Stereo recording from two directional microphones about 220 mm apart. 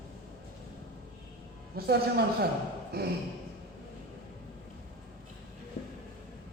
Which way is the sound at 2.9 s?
45° right (ahead or behind).